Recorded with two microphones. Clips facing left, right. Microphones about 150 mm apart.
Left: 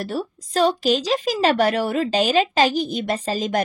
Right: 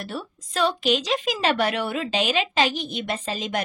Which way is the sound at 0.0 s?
40° left (ahead or behind).